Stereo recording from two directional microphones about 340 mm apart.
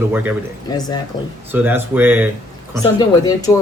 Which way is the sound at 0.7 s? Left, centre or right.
Centre.